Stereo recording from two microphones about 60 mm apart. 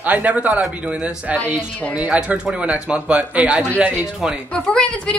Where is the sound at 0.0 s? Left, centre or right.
Right.